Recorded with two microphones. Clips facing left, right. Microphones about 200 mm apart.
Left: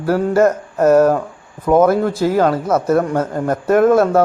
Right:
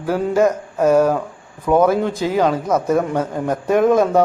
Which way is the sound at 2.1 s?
15° right (ahead or behind).